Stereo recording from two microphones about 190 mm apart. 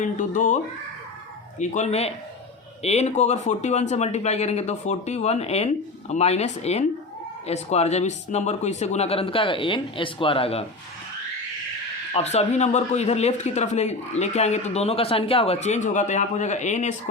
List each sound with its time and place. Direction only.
0.0 s speech: 40° left (ahead or behind)
12.1 s speech: 35° left (ahead or behind)